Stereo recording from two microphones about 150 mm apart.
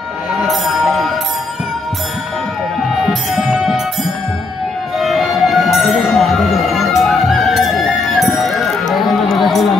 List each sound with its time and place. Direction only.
0.3 s music: centre (ahead or behind)
3.0 s music: centre (ahead or behind)